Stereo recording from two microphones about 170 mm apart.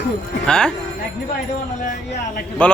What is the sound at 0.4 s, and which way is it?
Speech, 5° left (ahead or behind).